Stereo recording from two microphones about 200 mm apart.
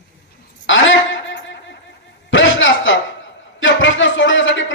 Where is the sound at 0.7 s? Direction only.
70° left (ahead or behind).